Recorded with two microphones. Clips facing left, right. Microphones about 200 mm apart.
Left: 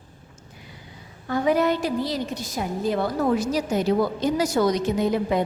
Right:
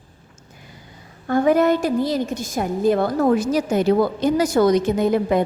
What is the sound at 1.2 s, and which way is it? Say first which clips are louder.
A woman's voice: right 5 dB; 50° right (ahead or behind).